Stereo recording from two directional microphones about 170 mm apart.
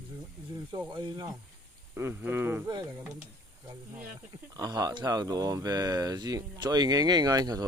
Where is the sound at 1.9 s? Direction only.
15° right (ahead or behind).